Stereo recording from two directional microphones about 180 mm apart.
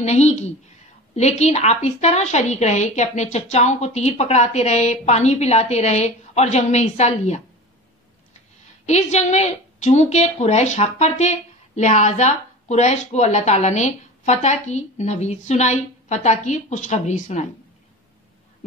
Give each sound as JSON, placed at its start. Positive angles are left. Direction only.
{"t": 0.0, "sound": "a woman's voice", "side_deg": 35}
{"t": 8.8, "sound": "a woman's voice", "side_deg": 40}